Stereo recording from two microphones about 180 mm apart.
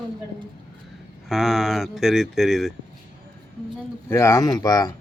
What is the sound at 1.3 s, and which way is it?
Speech, centre (ahead or behind).